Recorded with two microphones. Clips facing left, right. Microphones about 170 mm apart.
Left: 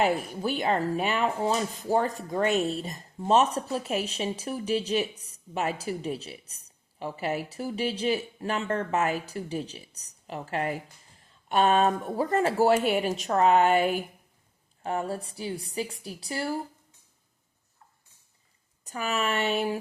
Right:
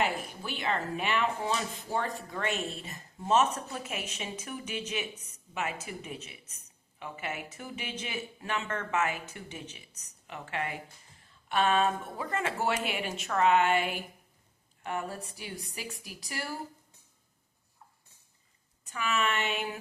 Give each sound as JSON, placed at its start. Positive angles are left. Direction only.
{"t": 0.0, "sound": "speech", "side_deg": 40}
{"t": 18.9, "sound": "speech", "side_deg": 40}